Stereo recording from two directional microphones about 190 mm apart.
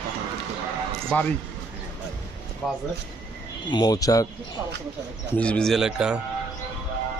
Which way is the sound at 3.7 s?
20° left (ahead or behind).